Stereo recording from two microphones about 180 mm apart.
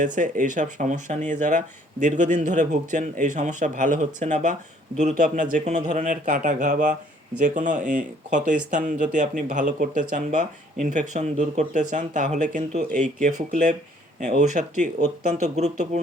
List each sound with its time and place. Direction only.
0.0 s speech: 45° right (ahead or behind)